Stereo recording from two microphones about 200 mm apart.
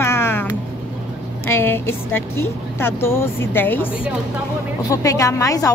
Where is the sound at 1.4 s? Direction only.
10° left (ahead or behind).